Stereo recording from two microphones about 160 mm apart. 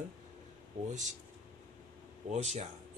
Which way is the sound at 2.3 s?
45° right (ahead or behind).